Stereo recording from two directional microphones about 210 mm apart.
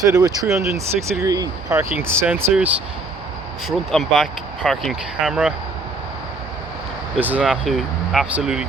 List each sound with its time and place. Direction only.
0.0 s speech: 15° right (ahead or behind)
0.6 s speech: 5° right (ahead or behind)
1.2 s speech: 15° right (ahead or behind)
7.2 s speech: 5° right (ahead or behind)